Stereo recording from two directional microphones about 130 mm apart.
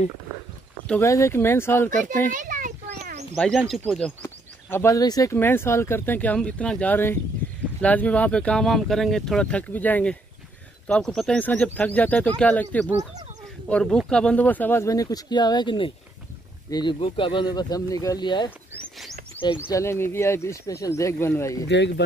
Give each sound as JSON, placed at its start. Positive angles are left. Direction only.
{"t": 1.0, "sound": "speech", "side_deg": 25}
{"t": 2.3, "sound": "a sound", "side_deg": -90}
{"t": 3.3, "sound": "speech", "side_deg": 5}
{"t": 4.2, "sound": "speech", "side_deg": 20}
{"t": 19.6, "sound": "speech", "side_deg": 20}